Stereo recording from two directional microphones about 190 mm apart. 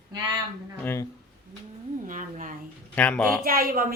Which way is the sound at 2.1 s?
45° right (ahead or behind).